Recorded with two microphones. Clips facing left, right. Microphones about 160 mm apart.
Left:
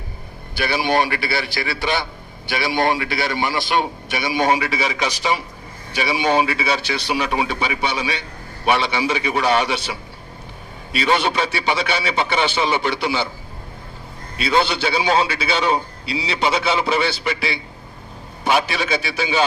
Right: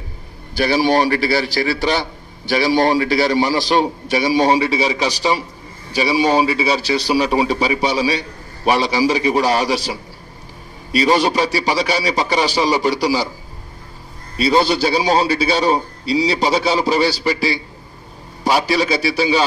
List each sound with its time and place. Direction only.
0.6 s a man's voice: 40° right (ahead or behind)
14.4 s a man's voice: 35° right (ahead or behind)